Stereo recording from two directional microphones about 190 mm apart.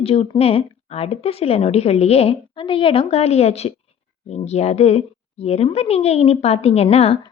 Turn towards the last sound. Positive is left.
turn(degrees=35)  # may be behind; listen again after turning